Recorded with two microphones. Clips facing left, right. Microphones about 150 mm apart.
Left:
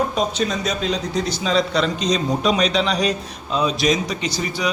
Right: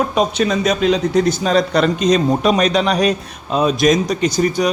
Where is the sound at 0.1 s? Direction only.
70° right (ahead or behind).